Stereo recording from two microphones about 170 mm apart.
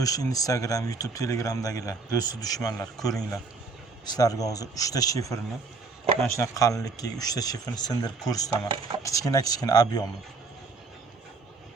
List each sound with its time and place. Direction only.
0.0 s speech: 20° left (ahead or behind)